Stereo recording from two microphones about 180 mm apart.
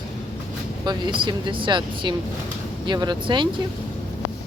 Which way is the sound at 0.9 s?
25° right (ahead or behind).